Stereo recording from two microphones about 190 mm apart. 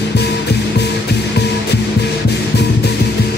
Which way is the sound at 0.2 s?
60° left (ahead or behind).